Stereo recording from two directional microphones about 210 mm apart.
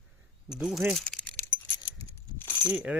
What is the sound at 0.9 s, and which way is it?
Keys jangling, centre (ahead or behind).